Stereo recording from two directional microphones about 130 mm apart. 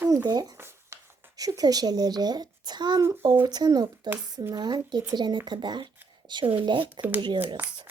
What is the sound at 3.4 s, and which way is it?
Speech, 30° right (ahead or behind).